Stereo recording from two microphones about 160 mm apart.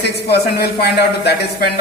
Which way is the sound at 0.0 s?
90° left.